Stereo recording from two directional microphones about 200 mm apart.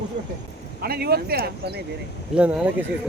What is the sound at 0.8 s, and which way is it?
Speech, 50° right (ahead or behind).